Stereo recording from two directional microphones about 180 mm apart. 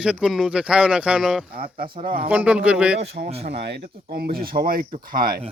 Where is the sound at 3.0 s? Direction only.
35° right (ahead or behind).